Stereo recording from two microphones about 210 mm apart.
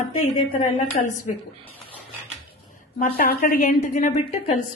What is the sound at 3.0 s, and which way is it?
A woman's voice, 45° left (ahead or behind).